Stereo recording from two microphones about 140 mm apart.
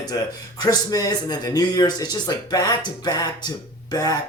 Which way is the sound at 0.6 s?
25° left (ahead or behind).